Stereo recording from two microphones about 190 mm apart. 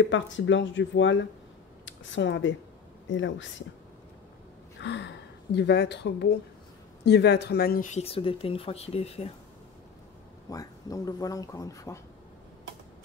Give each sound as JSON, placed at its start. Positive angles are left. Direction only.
{"t": 0.0, "sound": "speech", "side_deg": 75}
{"t": 4.7, "sound": "speech", "side_deg": 65}
{"t": 10.5, "sound": "speech", "side_deg": 20}